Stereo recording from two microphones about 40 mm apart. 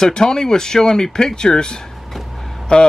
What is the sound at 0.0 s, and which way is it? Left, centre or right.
Speech, centre.